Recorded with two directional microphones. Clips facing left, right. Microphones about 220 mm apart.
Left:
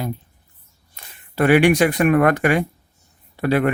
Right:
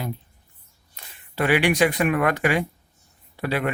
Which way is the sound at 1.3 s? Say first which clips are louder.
Left 6 dB; 50° left (ahead or behind).